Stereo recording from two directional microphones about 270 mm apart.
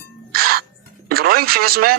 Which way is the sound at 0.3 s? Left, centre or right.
Right.